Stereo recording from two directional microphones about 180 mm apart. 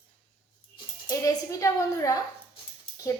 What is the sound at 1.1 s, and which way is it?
A woman's voice, 20° left (ahead or behind).